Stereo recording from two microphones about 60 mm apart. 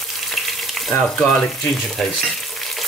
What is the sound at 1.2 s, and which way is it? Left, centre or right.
Speech, centre.